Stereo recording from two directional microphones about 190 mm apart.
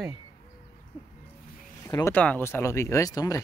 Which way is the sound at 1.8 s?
15° left (ahead or behind).